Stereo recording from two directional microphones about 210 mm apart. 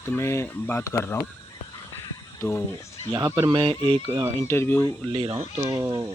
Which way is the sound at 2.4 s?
15° left (ahead or behind).